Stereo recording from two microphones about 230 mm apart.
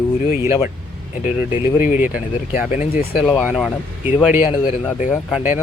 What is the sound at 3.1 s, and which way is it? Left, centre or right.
Speech, centre.